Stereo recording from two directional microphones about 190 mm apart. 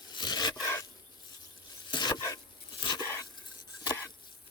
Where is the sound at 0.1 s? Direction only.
25° left (ahead or behind).